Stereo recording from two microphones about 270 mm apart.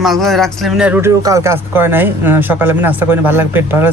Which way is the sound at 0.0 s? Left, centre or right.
Centre.